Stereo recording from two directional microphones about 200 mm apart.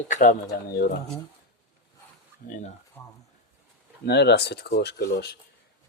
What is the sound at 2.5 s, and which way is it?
Speech, 35° left (ahead or behind).